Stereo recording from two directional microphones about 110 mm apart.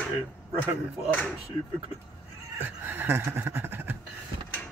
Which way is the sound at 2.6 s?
15° right (ahead or behind).